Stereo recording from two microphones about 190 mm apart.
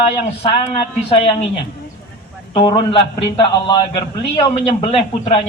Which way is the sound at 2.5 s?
25° left (ahead or behind).